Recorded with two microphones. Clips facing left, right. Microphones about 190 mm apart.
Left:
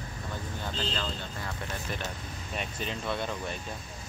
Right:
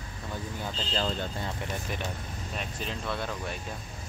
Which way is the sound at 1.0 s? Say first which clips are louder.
Right 5 dB; 25° right (ahead or behind).